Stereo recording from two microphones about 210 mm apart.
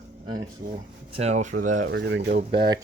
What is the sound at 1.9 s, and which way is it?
Speech, 55° right (ahead or behind).